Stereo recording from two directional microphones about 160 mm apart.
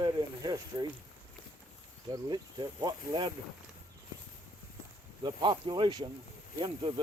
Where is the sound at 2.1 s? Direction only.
25° right (ahead or behind).